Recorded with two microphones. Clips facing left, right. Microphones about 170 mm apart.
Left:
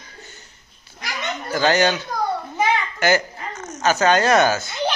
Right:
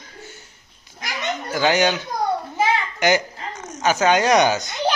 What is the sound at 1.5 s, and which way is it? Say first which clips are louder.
Speech: left 1 dB; 15° right (ahead or behind).